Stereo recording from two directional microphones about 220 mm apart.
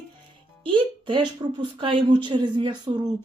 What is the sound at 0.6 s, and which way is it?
A woman's voice, 20° right (ahead or behind).